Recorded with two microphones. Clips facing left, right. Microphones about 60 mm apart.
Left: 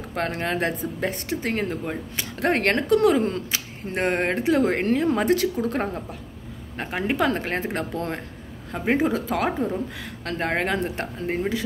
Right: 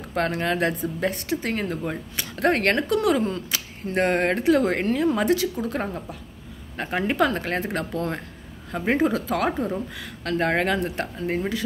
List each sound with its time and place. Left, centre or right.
0.1 s speech: left
3.9 s a woman's voice: centre; by 5.9 s left
6.8 s speech: left
8.7 s speech: centre